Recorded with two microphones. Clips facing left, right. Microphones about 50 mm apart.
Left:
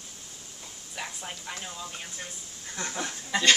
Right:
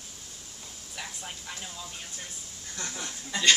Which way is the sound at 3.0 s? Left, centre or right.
Left.